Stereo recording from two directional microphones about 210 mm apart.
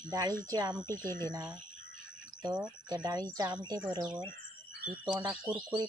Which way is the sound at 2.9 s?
15° right (ahead or behind).